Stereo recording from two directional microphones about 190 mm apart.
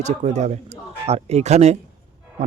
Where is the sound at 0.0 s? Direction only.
35° right (ahead or behind).